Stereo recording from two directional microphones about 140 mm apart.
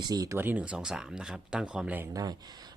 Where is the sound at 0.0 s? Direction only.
25° right (ahead or behind).